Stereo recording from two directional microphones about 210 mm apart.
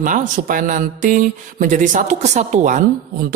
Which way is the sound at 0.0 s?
40° right (ahead or behind).